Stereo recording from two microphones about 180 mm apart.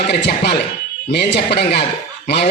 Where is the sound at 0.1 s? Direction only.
65° left (ahead or behind).